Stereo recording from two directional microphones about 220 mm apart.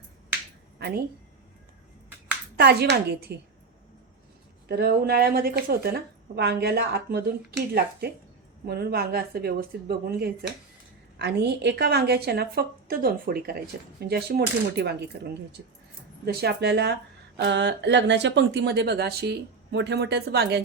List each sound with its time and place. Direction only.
2.6 s speech: 45° right (ahead or behind)
4.7 s speech: 45° right (ahead or behind)
16.2 s speech: 45° right (ahead or behind)